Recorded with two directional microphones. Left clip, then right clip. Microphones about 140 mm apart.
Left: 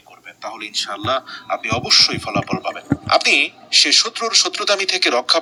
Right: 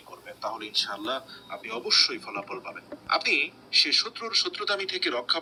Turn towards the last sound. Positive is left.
turn(degrees=90)